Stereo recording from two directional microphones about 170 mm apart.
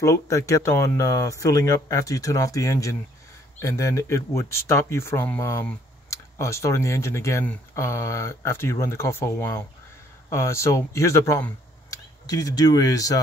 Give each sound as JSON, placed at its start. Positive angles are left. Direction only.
{"t": 0.0, "sound": "speech", "side_deg": 20}